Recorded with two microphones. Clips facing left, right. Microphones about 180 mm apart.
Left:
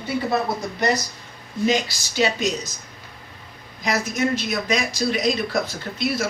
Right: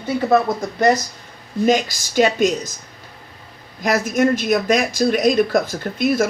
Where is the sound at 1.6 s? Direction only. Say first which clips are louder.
Right 4 dB; 50° right (ahead or behind).